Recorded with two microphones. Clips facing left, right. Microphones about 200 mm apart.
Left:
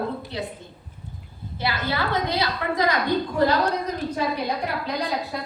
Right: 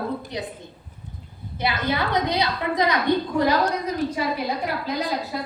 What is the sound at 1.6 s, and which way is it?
A woman's voice, 20° right (ahead or behind).